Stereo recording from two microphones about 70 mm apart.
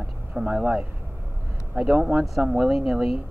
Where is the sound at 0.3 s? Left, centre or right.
Centre.